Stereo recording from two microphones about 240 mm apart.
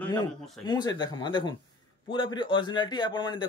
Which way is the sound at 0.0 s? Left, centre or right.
Centre.